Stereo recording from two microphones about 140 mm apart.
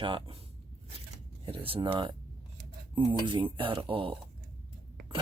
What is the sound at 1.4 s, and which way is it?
Speech, 40° right (ahead or behind).